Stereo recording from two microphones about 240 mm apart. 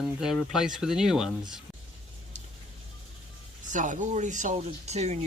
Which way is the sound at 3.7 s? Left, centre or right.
Right.